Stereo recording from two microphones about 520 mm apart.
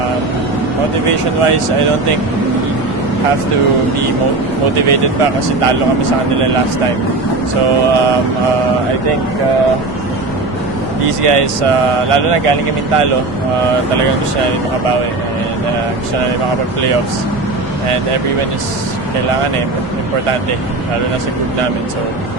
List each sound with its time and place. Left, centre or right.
1.0 s speech: right
4.9 s speech: right
11.2 s speech: right
17.8 s speech: right